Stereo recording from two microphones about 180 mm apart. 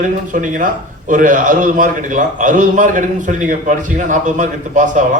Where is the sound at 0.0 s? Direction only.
45° right (ahead or behind).